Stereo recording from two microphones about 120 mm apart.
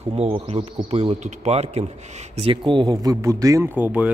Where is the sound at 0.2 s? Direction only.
50° right (ahead or behind).